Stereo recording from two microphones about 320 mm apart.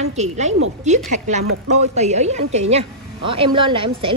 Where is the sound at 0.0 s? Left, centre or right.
Right.